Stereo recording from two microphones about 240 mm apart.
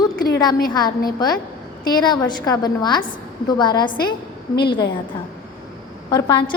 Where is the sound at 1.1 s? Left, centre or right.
Centre.